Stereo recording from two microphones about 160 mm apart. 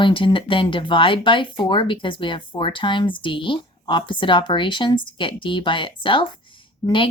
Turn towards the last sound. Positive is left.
turn(degrees=30)  # may be behind; listen again after turning